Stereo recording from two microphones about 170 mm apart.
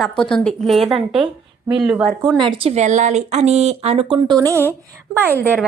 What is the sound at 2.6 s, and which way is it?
Speech, 40° right (ahead or behind).